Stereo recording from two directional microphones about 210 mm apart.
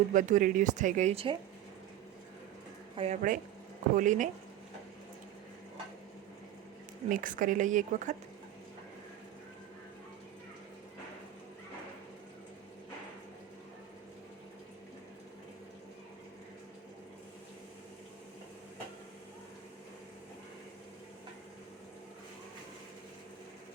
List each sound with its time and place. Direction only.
0.1 s speech: 40° right (ahead or behind)
2.9 s speech: 30° right (ahead or behind)
7.1 s speech: 40° right (ahead or behind)